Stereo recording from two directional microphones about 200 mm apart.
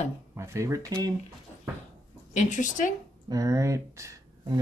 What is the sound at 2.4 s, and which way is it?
Speech, 40° left (ahead or behind).